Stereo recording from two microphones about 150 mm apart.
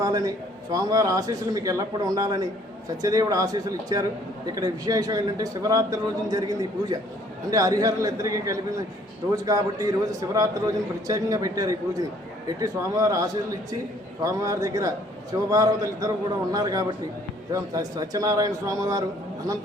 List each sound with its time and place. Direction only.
0.0 s a man's voice: 25° right (ahead or behind)